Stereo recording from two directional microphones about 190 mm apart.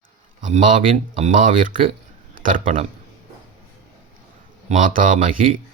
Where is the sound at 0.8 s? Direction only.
30° right (ahead or behind).